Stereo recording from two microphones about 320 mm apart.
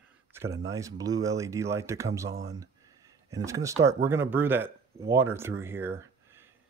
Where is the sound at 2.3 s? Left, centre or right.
Centre.